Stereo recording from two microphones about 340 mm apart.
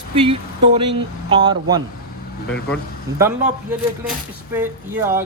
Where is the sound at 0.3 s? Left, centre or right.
Centre.